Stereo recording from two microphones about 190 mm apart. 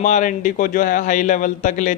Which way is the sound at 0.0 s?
40° left (ahead or behind).